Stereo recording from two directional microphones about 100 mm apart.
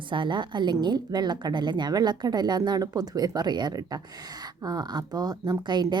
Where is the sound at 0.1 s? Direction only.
50° right (ahead or behind).